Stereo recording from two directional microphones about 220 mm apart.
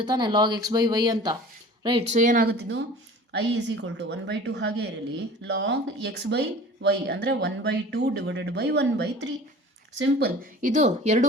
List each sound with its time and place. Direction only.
0.0 s a woman's voice: 20° right (ahead or behind); by 10.7 s 45° right (ahead or behind)
10.8 s speech: 30° right (ahead or behind)